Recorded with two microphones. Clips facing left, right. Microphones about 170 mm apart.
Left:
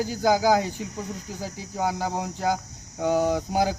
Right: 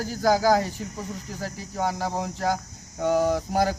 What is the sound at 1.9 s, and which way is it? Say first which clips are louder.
Speech: left 1 dB; centre (ahead or behind).